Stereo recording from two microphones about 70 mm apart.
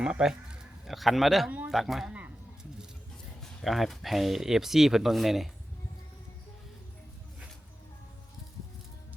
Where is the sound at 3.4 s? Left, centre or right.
Centre.